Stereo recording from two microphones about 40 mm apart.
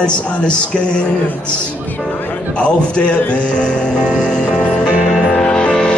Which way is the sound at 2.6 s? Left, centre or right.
Left.